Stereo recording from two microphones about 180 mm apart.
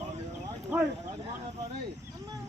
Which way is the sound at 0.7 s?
10° right (ahead or behind).